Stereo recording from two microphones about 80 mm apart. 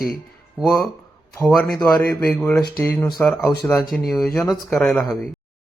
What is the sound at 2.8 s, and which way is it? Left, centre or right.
Speech, left.